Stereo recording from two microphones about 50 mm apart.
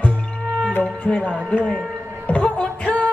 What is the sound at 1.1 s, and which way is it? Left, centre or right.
Music, left.